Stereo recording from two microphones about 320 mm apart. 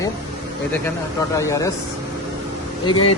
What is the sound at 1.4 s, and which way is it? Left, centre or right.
Speech, centre.